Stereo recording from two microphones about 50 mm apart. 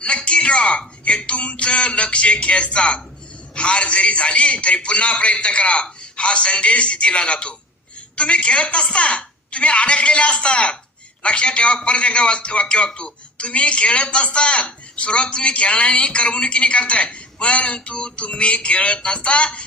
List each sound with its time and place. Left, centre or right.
0.0 s a man's voice: left